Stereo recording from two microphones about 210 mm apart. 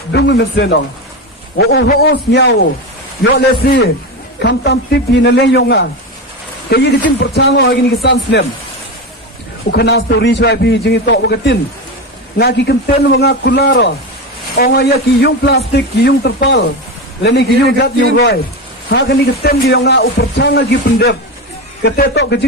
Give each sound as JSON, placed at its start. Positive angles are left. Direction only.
{"t": 0.1, "sound": "a man's voice", "side_deg": 55}
{"t": 9.7, "sound": "a man's voice", "side_deg": 50}